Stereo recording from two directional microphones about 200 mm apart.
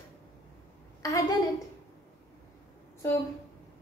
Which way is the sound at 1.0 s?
15° left (ahead or behind).